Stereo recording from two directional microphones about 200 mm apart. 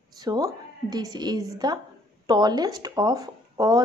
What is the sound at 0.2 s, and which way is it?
A woman's voice, 20° right (ahead or behind).